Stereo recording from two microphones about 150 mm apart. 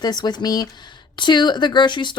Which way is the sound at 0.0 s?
25° left (ahead or behind).